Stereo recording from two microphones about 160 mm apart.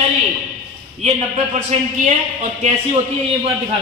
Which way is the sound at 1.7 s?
40° right (ahead or behind).